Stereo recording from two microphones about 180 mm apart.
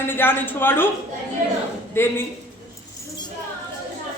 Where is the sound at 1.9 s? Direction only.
15° left (ahead or behind).